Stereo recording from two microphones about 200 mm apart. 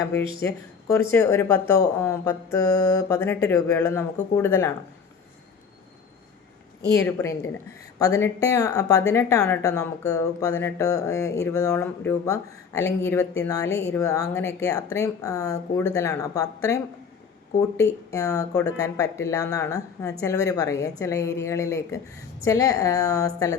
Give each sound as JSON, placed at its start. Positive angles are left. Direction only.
{"t": 0.3, "sound": "speech", "side_deg": 15}
{"t": 6.9, "sound": "speech", "side_deg": 15}